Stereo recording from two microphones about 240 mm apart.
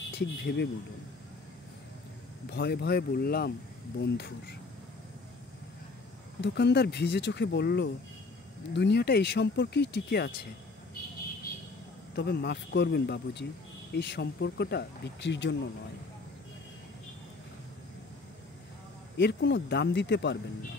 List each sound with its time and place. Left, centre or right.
0.1 s speech: left
2.5 s speech: left
6.4 s speech: left
12.2 s speech: left
19.1 s speech: left